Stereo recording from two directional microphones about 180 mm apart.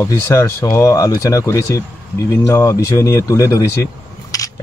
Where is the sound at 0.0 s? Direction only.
15° left (ahead or behind).